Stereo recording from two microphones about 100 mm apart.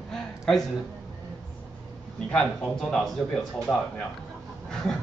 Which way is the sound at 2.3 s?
5° left (ahead or behind).